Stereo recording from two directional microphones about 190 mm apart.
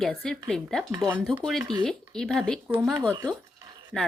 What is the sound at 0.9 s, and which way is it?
Speech, 10° right (ahead or behind).